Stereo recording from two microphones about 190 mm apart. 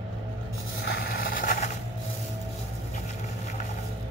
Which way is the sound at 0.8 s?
60° left (ahead or behind).